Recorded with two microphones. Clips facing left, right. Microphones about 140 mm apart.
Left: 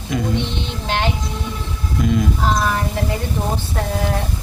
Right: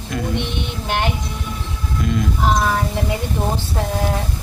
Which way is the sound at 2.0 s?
Centre (ahead or behind).